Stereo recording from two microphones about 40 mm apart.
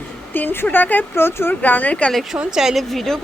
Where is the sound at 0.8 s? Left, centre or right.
Left.